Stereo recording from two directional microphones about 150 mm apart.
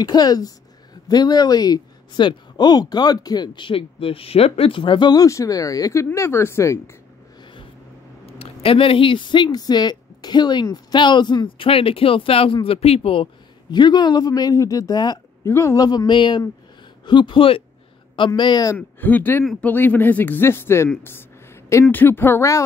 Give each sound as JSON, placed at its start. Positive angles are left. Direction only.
{"t": 0.0, "sound": "speech", "side_deg": 25}
{"t": 8.3, "sound": "speech", "side_deg": 40}
{"t": 18.8, "sound": "a man's voice", "side_deg": 10}
{"t": 19.4, "sound": "speech", "side_deg": 0}
{"t": 19.7, "sound": "a man's voice", "side_deg": 10}